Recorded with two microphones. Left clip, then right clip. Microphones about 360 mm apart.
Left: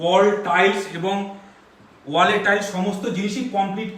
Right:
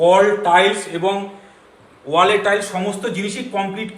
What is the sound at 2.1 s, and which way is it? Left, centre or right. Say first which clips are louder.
Speech: right 3 dB; centre.